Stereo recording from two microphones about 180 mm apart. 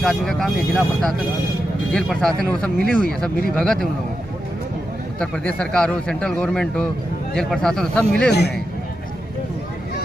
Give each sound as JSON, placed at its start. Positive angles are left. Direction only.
{"t": 0.0, "sound": "a man's voice", "side_deg": 0}
{"t": 5.2, "sound": "a man's voice", "side_deg": 5}
{"t": 8.3, "sound": "a man's voice", "side_deg": 65}